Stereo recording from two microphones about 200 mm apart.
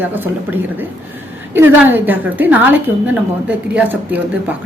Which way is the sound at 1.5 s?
10° right (ahead or behind).